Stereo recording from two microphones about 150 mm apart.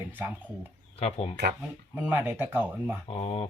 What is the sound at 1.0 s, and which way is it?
Speech, 45° left (ahead or behind).